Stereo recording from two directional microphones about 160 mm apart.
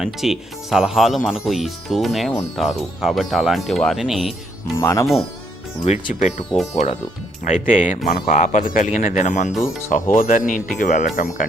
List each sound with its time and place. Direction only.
0.0 s speech: centre (ahead or behind)
4.8 s speech: 20° left (ahead or behind)
5.8 s speech: 45° left (ahead or behind)
7.4 s speech: 50° left (ahead or behind)